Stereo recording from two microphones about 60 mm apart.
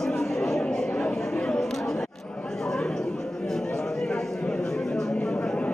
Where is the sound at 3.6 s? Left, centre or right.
Centre.